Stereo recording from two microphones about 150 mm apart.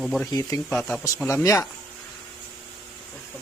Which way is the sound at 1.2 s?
20° left (ahead or behind).